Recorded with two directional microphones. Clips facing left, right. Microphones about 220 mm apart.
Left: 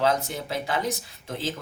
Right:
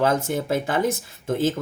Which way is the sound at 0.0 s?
50° right (ahead or behind).